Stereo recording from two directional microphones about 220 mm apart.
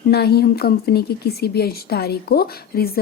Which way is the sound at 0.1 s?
45° left (ahead or behind).